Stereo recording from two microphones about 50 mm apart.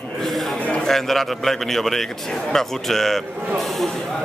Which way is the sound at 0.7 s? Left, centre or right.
Centre.